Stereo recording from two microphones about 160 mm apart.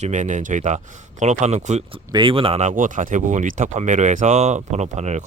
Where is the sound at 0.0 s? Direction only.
50° right (ahead or behind).